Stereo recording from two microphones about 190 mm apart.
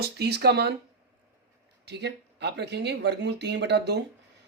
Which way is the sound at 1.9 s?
60° right (ahead or behind).